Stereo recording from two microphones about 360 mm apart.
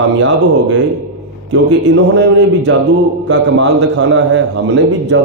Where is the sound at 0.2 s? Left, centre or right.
Right.